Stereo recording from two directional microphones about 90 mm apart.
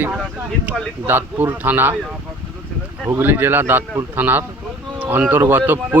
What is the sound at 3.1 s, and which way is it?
Speech, 25° right (ahead or behind).